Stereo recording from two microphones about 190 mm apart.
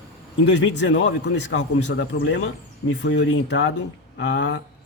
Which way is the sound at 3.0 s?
70° left (ahead or behind).